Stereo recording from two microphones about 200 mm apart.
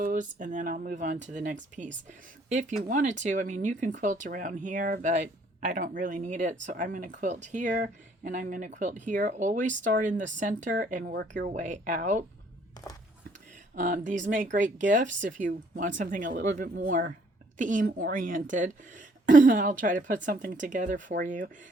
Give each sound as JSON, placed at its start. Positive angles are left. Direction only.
{"t": 0.0, "sound": "speech", "side_deg": -40}
{"t": 13.7, "sound": "speech", "side_deg": -40}